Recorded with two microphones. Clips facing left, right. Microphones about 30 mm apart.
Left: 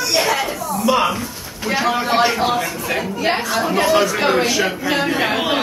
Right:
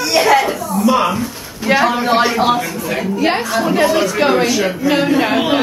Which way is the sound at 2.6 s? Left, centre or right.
Centre.